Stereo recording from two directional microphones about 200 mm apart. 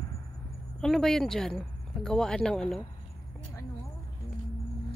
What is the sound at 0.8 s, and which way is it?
Speech, centre (ahead or behind).